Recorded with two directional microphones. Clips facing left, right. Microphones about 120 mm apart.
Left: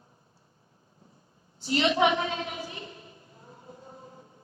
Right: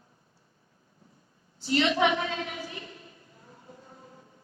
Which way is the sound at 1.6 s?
25° left (ahead or behind).